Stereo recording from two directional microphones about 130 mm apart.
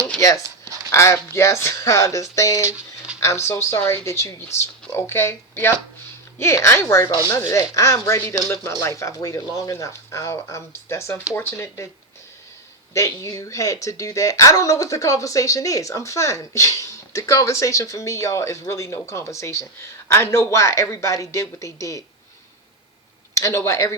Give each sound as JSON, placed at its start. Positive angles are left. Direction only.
{"t": 0.2, "sound": "speech", "side_deg": 25}
{"t": 2.6, "sound": "a sound", "side_deg": -10}
{"t": 3.2, "sound": "speech", "side_deg": 20}
{"t": 12.9, "sound": "speech", "side_deg": 20}
{"t": 23.3, "sound": "speech", "side_deg": 20}